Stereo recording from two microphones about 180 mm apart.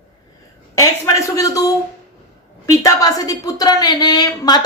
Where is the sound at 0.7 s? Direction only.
15° left (ahead or behind).